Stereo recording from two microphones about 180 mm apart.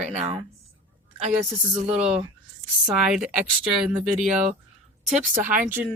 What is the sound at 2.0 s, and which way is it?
A woman's voice, 5° right (ahead or behind).